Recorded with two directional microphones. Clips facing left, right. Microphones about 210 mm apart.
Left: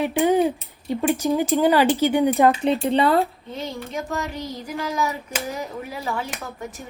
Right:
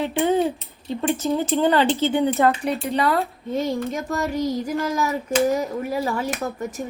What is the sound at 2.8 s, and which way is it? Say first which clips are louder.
Music: left 3 dB; 30° left (ahead or behind).